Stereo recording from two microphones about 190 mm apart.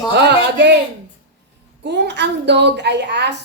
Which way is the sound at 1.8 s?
65° right (ahead or behind).